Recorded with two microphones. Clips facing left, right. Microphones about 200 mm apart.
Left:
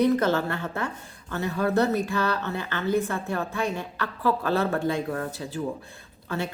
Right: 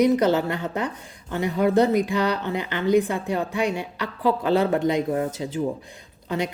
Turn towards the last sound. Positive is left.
turn(degrees=-15)  # may be behind; listen again after turning